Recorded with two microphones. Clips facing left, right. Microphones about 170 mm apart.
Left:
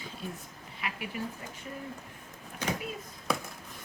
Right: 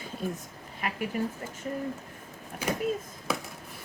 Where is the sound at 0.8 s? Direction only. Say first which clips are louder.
Right 4 dB; 45° right (ahead or behind).